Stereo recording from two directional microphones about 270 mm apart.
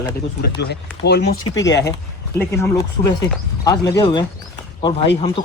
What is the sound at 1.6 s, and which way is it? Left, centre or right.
Speech, centre.